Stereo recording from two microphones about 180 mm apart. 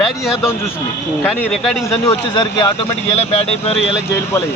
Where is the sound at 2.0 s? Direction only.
25° left (ahead or behind).